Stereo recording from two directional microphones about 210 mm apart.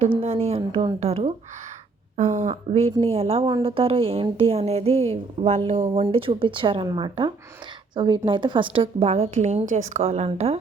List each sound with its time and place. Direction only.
0.2 s a woman's voice: 30° right (ahead or behind)